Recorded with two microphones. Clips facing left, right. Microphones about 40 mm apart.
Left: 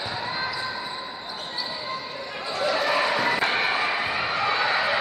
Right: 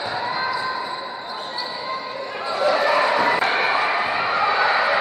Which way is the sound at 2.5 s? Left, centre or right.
Centre.